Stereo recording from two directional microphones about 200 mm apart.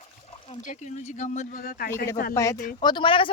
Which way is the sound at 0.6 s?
40° left (ahead or behind).